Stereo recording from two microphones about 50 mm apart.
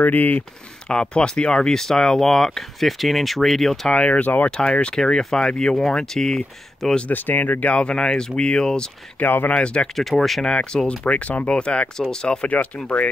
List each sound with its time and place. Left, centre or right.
0.0 s speech: left
0.8 s speech: centre
3.9 s speech: left
4.5 s speech: centre
7.1 s speech: left
7.6 s speech: left
9.2 s speech: left
9.5 s speech: left
9.9 s speech: centre
10.4 s speech: centre